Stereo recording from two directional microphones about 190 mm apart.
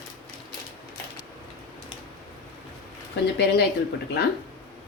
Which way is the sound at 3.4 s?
60° left (ahead or behind).